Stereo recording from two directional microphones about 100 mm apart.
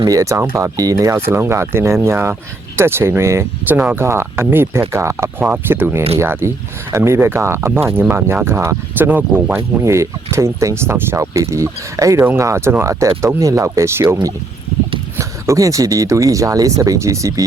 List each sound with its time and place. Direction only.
0.0 s speech: 35° right (ahead or behind)
15.2 s speech: 35° right (ahead or behind)